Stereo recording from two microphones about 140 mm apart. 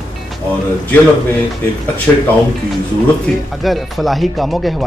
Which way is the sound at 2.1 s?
15° left (ahead or behind).